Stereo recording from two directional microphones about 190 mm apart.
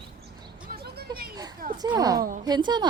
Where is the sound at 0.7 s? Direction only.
55° right (ahead or behind).